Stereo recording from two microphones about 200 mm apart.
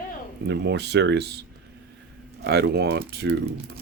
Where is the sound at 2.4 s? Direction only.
55° right (ahead or behind).